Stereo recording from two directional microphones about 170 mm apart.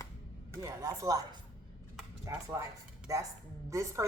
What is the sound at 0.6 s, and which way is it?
A woman's voice, 20° right (ahead or behind).